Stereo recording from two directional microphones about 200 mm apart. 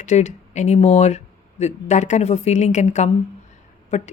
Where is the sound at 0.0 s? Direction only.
35° left (ahead or behind).